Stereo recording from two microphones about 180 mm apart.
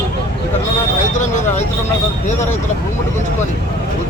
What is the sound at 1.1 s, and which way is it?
Speech, 40° left (ahead or behind).